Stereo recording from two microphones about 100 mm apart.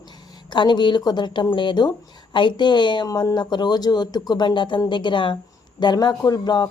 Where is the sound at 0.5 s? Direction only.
50° left (ahead or behind).